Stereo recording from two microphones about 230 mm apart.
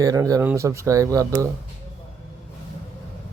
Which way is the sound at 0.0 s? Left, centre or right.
Centre.